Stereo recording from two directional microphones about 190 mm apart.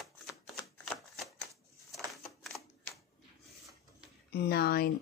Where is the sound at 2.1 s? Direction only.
Centre (ahead or behind).